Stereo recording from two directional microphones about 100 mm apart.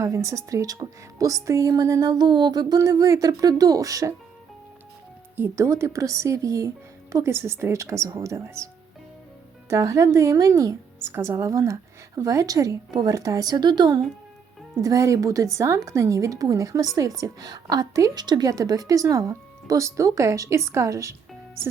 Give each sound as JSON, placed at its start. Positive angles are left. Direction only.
{"t": 0.0, "sound": "a woman's voice", "side_deg": -30}
{"t": 5.4, "sound": "a woman's voice", "side_deg": -30}
{"t": 14.8, "sound": "a woman's voice", "side_deg": -35}